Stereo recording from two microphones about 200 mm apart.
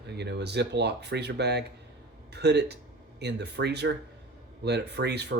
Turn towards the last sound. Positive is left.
turn(degrees=-55)  # may be behind; listen again after turning